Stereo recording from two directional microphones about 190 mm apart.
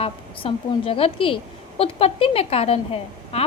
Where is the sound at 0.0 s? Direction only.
30° left (ahead or behind).